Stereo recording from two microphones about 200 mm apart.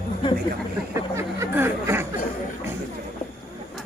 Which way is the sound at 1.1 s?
10° right (ahead or behind).